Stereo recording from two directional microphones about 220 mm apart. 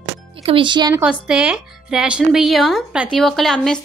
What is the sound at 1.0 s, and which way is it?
Speech, 5° right (ahead or behind).